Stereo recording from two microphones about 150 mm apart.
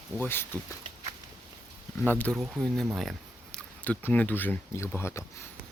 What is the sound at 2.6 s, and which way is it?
Speech, centre (ahead or behind).